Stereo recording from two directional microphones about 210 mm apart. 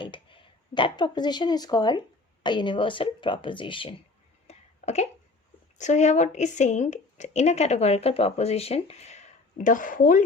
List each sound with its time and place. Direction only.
0.0 s speech: 25° left (ahead or behind)
4.4 s a sound: 30° left (ahead or behind)
5.7 s a woman's voice: 35° left (ahead or behind)